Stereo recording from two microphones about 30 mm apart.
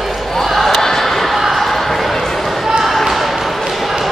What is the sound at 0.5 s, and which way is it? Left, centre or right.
Basketball bounce, centre.